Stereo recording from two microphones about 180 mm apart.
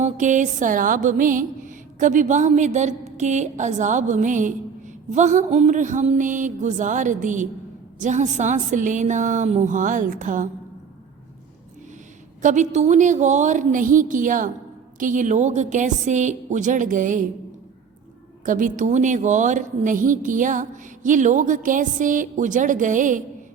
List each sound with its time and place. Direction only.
0.0 s a woman's voice: 45° right (ahead or behind)
12.4 s a woman's voice: 45° right (ahead or behind)
18.4 s a woman's voice: 45° right (ahead or behind)